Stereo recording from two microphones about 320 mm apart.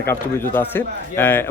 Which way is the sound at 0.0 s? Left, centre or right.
Centre.